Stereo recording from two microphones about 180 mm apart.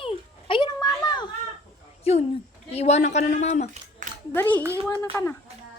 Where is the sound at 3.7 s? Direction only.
40° right (ahead or behind).